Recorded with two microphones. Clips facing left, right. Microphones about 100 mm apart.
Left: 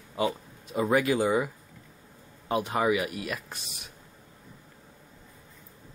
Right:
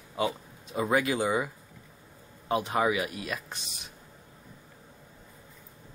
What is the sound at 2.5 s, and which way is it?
Speech, 25° right (ahead or behind).